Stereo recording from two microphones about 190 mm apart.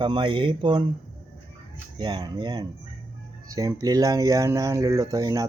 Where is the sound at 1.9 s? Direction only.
25° right (ahead or behind).